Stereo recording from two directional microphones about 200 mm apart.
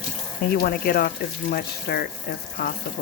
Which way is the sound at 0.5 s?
50° left (ahead or behind).